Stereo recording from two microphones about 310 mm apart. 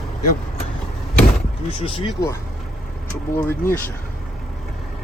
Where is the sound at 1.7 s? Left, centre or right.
Centre.